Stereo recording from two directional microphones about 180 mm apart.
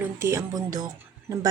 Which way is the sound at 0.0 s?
15° right (ahead or behind).